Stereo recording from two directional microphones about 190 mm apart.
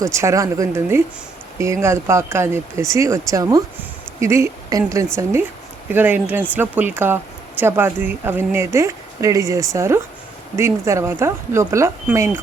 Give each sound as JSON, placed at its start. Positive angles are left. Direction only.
{"t": 0.0, "sound": "speech", "side_deg": -15}